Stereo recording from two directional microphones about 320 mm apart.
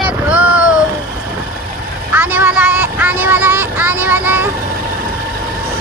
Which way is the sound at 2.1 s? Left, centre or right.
Centre.